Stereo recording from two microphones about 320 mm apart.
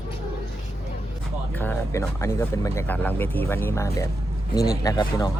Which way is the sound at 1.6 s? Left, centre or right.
Centre.